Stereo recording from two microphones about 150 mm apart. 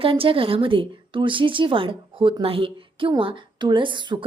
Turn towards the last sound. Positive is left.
turn(degrees=-30)  # may be behind; listen again after turning